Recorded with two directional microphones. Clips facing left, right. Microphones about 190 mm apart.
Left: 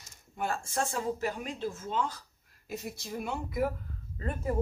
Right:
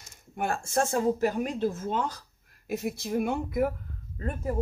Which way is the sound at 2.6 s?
55° right (ahead or behind).